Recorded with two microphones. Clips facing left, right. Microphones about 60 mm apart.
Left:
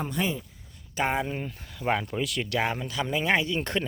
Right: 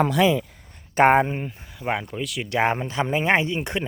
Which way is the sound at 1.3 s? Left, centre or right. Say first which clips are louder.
Right 3 dB; centre.